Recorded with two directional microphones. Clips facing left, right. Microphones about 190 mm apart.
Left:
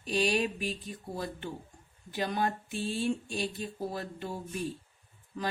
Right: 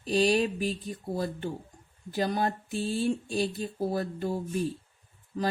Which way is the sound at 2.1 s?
40° right (ahead or behind).